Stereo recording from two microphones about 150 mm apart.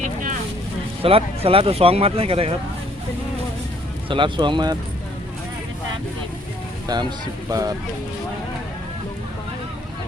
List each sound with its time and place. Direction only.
0.0 s vehicle: 60° right (ahead or behind)
1.0 s speech: 40° right (ahead or behind)
4.1 s speech: 30° right (ahead or behind)
6.8 s speech: 30° right (ahead or behind)